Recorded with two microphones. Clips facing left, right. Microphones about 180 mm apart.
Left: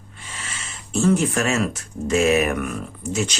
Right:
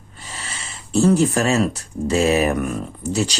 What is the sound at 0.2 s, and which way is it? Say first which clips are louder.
Speech: right 2 dB; 35° right (ahead or behind).